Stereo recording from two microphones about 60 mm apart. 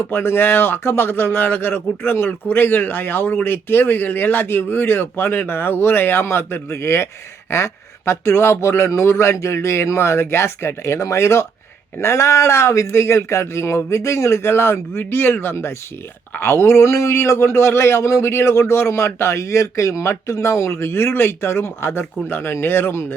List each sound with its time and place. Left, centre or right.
0.0 s a man's voice: left